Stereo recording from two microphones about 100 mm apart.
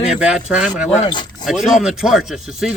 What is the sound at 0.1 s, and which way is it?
Speech, 10° right (ahead or behind).